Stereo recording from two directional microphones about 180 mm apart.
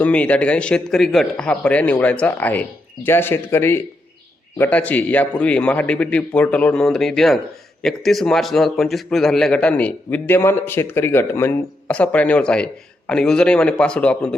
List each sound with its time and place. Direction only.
0.0 s a man's voice: 5° left (ahead or behind)